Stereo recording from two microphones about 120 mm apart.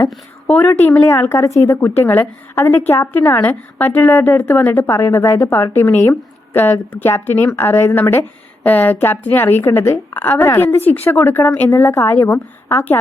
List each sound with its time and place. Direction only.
0.4 s a woman's voice: 15° left (ahead or behind)